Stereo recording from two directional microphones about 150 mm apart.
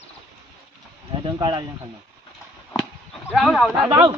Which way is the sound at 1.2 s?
30° right (ahead or behind).